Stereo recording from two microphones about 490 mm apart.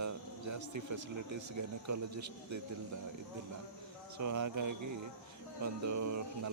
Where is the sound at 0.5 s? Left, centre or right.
Right.